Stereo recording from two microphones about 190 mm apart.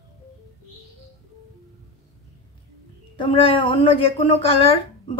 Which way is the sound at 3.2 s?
30° left (ahead or behind).